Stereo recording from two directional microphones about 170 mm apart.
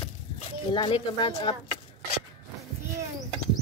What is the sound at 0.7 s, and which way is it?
Speech, 30° left (ahead or behind).